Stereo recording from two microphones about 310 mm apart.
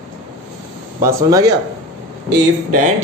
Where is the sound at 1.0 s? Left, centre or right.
Centre.